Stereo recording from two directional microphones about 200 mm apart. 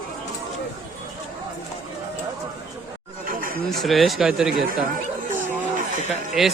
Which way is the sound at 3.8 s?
Centre (ahead or behind).